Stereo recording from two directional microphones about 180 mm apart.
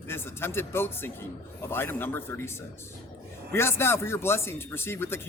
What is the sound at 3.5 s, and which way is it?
Speech, 15° left (ahead or behind).